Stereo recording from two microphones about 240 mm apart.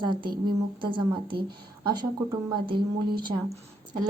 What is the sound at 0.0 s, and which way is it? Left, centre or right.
A woman's voice, centre.